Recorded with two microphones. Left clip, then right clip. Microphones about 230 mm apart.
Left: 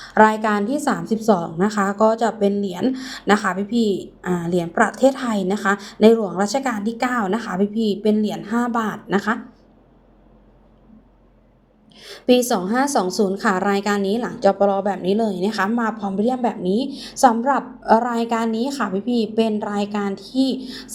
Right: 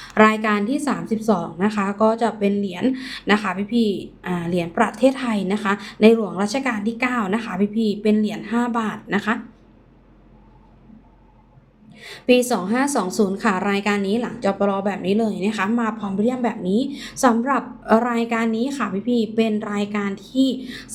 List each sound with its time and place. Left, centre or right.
0.0 s a woman's voice: centre
11.9 s a woman's voice: centre